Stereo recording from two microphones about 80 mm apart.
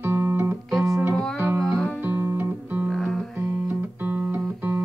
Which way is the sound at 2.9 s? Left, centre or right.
Centre.